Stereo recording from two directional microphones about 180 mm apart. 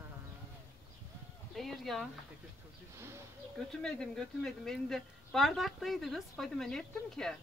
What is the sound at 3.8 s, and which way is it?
A woman's voice, 5° left (ahead or behind).